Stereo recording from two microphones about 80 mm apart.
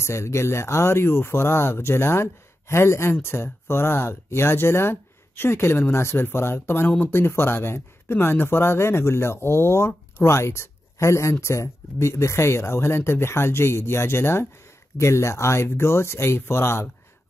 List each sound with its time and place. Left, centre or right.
0.0 s speech: left